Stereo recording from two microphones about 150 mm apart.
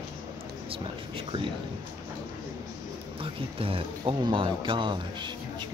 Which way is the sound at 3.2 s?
35° right (ahead or behind).